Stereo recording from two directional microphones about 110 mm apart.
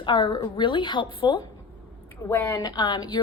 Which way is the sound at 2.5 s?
40° left (ahead or behind).